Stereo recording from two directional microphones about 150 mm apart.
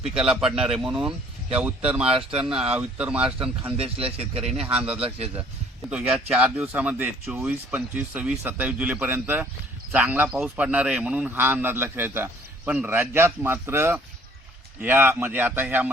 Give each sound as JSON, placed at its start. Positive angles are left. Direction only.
{"t": 0.2, "sound": "a man's voice", "side_deg": -5}
{"t": 2.3, "sound": "a man's voice", "side_deg": -5}
{"t": 3.8, "sound": "speech", "side_deg": -40}
{"t": 4.7, "sound": "a man's voice", "side_deg": -10}
{"t": 4.9, "sound": "speech", "side_deg": -40}
{"t": 5.9, "sound": "a man's voice", "side_deg": -5}